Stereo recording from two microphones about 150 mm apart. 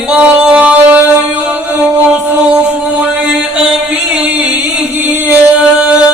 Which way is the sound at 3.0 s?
5° right (ahead or behind).